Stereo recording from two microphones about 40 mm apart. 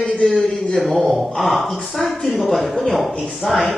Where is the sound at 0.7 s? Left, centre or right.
Centre.